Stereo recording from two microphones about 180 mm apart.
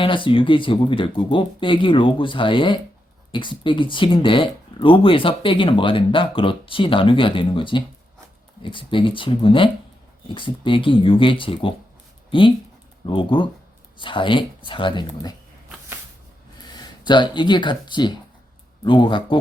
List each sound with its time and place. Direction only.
0.0 s speech: 25° left (ahead or behind)
16.7 s speech: 25° left (ahead or behind)